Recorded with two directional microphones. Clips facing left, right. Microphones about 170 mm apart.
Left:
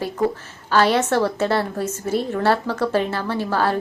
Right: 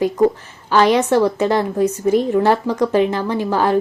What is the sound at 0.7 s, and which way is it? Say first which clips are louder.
Speech: right 4 dB; 15° right (ahead or behind).